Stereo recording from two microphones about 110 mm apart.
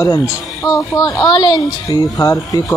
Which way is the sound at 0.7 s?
35° left (ahead or behind).